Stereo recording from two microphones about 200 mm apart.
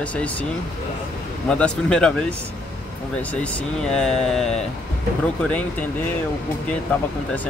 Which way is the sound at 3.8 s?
5° left (ahead or behind).